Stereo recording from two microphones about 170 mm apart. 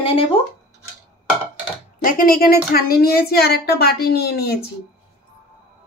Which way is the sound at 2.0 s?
55° left (ahead or behind).